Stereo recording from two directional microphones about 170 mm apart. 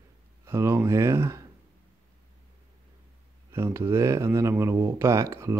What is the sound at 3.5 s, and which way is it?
Speech, 15° right (ahead or behind).